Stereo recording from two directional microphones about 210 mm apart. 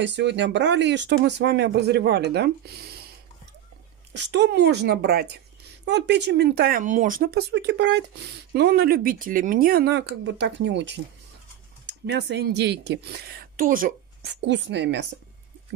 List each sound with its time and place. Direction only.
0.0 s speech: 55° right (ahead or behind)
4.1 s speech: 55° right (ahead or behind)